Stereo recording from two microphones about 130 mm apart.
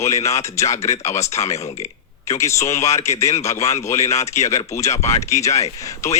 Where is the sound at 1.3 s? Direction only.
55° left (ahead or behind).